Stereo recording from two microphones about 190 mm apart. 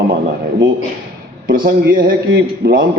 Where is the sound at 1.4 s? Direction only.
50° right (ahead or behind).